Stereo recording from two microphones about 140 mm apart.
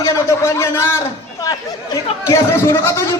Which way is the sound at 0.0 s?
20° left (ahead or behind).